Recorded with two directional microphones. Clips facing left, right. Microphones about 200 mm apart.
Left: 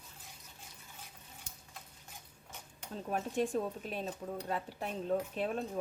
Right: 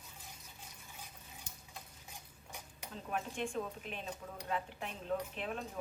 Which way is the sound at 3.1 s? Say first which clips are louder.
Left 5 dB; 40° left (ahead or behind).